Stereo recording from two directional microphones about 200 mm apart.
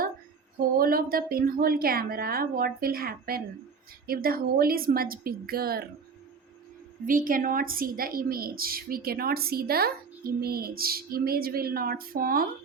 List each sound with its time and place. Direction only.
0.8 s a woman's voice: 45° right (ahead or behind)
7.0 s a woman's voice: 45° right (ahead or behind)